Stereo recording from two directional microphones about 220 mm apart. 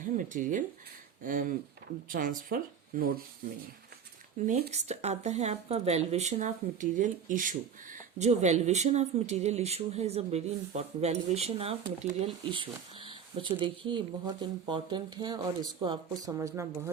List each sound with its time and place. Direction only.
0.0 s speech: 35° right (ahead or behind)
4.4 s speech: 35° right (ahead or behind); by 16.9 s 15° right (ahead or behind)